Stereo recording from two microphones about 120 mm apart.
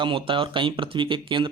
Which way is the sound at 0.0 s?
45° right (ahead or behind).